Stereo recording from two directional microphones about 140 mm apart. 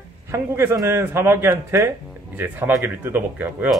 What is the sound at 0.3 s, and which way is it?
Speech, 20° right (ahead or behind).